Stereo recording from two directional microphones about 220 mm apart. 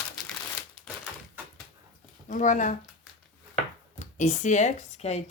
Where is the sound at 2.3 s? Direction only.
35° left (ahead or behind).